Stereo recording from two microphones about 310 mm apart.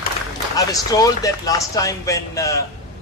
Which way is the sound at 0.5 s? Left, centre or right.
Centre.